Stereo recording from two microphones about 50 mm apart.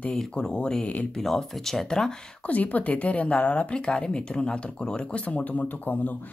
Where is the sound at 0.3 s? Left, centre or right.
Centre.